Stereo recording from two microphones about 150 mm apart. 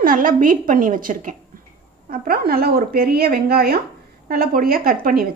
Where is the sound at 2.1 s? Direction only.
85° right.